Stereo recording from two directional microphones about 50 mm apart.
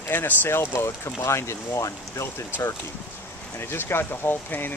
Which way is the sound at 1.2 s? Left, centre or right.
Left.